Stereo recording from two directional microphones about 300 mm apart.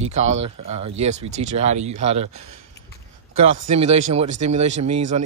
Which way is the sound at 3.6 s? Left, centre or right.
Right.